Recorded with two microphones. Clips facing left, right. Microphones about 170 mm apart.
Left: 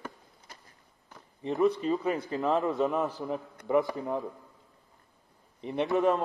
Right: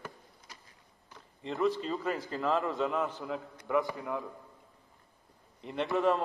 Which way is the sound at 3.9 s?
40° left (ahead or behind).